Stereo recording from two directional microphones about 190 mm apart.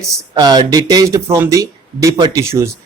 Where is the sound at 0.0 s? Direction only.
20° right (ahead or behind).